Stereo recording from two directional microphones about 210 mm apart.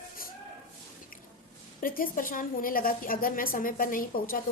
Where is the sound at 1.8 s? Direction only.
40° left (ahead or behind).